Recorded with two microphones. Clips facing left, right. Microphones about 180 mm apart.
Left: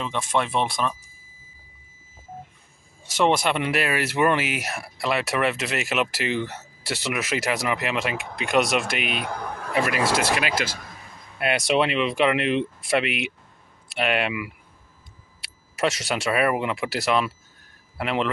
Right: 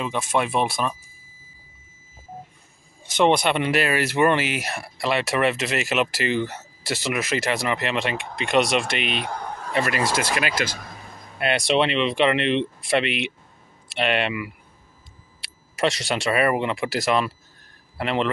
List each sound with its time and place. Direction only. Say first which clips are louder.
0.0 s speech: right 1 dB; 10° right (ahead or behind)
3.0 s speech: right 2 dB; centre (ahead or behind)
9.2 s a sound: even; 60° left (ahead or behind)
9.8 s speech: left 1 dB; 5° left (ahead or behind)